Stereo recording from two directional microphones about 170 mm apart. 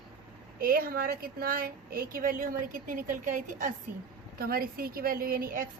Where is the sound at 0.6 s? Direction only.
55° right (ahead or behind).